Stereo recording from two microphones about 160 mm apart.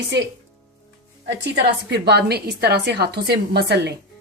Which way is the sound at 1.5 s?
90° right.